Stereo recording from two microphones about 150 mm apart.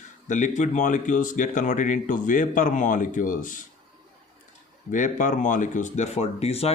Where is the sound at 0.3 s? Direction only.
55° left (ahead or behind).